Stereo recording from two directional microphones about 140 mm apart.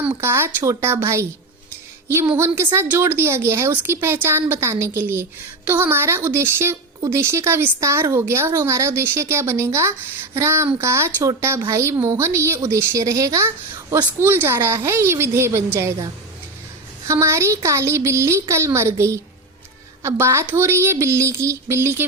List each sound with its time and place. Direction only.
0.0 s a woman's voice: 15° right (ahead or behind)
2.7 s a woman's voice: 15° right (ahead or behind)
17.1 s speech: 20° right (ahead or behind)